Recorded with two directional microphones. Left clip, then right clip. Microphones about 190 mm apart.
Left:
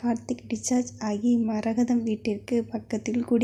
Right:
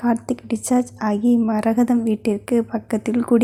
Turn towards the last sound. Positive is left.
turn(degrees=-15)  # may be behind; listen again after turning